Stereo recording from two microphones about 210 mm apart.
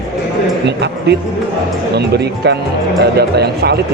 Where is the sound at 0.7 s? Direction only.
50° right (ahead or behind).